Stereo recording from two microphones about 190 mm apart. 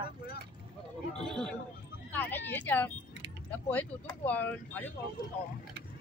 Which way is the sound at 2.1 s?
10° left (ahead or behind).